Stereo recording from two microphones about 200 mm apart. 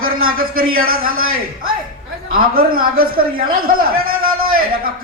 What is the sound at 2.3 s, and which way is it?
A man's voice, 45° right (ahead or behind).